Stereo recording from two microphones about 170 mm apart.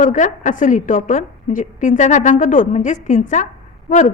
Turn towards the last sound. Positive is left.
turn(degrees=45)  # may be behind; listen again after turning